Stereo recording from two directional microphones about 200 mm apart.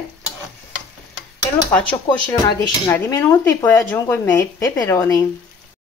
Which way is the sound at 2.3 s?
15° left (ahead or behind).